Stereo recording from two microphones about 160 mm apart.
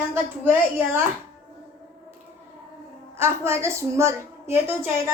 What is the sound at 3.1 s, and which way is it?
A woman's voice, 15° right (ahead or behind).